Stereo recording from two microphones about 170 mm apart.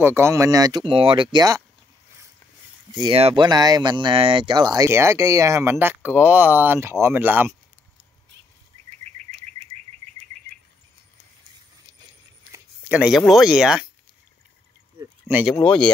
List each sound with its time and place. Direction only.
0.0 s speech: 15° right (ahead or behind)
2.9 s speech: 25° right (ahead or behind)
3.2 s speech: 35° right (ahead or behind)
3.4 s speech: 25° right (ahead or behind)
12.5 s a sound: 10° right (ahead or behind)
13.3 s speech: 5° right (ahead or behind)
15.6 s speech: 5° left (ahead or behind)